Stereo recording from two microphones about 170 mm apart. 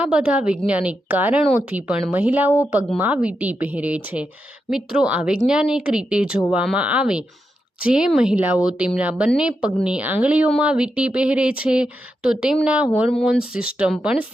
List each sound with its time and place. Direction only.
0.0 s speech: 5° right (ahead or behind)